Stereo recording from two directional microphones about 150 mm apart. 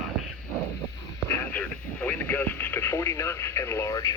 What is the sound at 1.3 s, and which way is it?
Speech, 15° left (ahead or behind).